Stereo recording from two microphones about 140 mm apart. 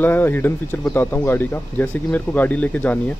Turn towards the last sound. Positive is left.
turn(degrees=10)  # may be behind; listen again after turning